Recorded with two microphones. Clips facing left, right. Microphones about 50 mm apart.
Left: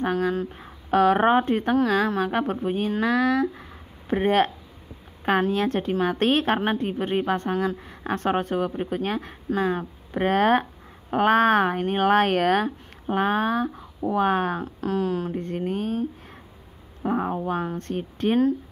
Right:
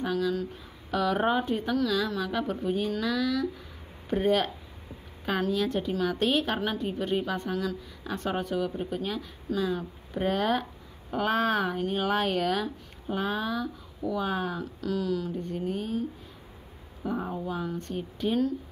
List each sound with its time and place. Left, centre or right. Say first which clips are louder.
0.0 s a woman's voice: left 4 dB; left